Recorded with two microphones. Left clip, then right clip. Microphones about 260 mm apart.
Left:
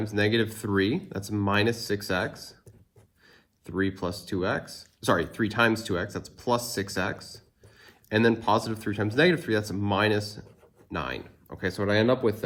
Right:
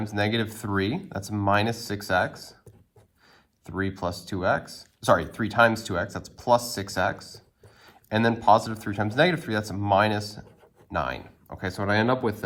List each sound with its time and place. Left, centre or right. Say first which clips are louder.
0.0 s speech: left 1 dB; right
3.7 s speech: even; right